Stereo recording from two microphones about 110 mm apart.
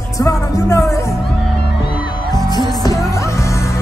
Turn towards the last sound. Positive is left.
turn(degrees=30)  # may be behind; listen again after turning